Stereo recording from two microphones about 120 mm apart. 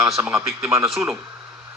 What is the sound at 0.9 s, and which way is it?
Speech, centre (ahead or behind).